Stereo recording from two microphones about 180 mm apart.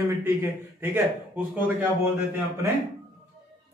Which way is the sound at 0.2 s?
10° right (ahead or behind).